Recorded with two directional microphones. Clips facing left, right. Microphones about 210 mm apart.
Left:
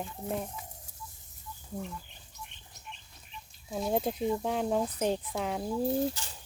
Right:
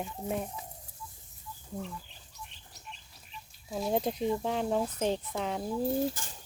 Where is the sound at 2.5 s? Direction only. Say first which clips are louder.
Left 1 dB; 35° right (ahead or behind).